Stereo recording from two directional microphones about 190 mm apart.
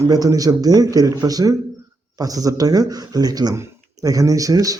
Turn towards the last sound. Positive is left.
turn(degrees=-20)  # may be behind; listen again after turning